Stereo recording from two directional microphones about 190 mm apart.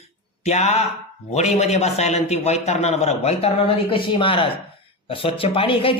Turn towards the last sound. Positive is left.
turn(degrees=30)  # may be behind; listen again after turning